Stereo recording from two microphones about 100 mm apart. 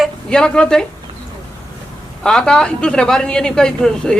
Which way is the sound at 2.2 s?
5° left (ahead or behind).